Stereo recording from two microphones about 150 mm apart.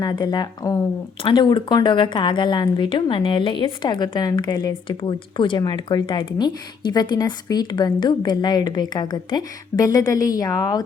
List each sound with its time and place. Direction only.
0.0 s a woman's voice: 25° left (ahead or behind)